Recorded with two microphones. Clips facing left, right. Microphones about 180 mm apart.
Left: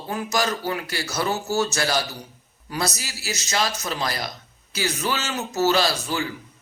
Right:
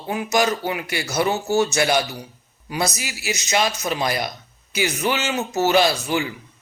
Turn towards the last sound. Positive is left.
turn(degrees=-20)  # may be behind; listen again after turning